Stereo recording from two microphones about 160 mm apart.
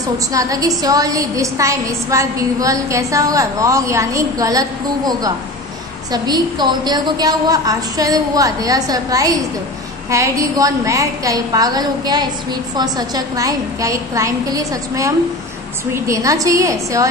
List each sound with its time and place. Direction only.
0.3 s a woman's voice: 20° right (ahead or behind)